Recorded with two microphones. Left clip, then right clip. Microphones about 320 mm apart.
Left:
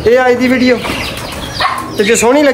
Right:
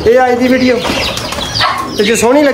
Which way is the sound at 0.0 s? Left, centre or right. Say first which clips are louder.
Even; centre.